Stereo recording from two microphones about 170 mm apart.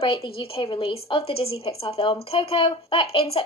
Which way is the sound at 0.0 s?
30° left (ahead or behind).